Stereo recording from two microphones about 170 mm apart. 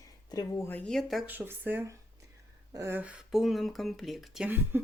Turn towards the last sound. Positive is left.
turn(degrees=-10)  # may be behind; listen again after turning